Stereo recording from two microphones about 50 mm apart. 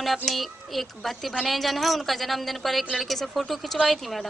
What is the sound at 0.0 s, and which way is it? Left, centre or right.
A woman's voice, centre.